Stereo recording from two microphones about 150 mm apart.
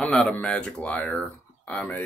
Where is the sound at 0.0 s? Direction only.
10° left (ahead or behind).